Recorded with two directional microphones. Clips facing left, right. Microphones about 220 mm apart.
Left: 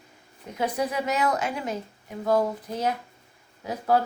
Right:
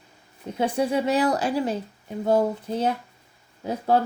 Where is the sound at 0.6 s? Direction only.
30° right (ahead or behind).